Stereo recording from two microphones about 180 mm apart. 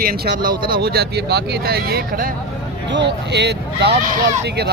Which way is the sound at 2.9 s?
75° right (ahead or behind).